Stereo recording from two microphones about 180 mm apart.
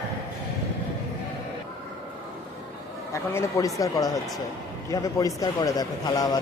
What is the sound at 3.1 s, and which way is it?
A man's voice, 15° left (ahead or behind).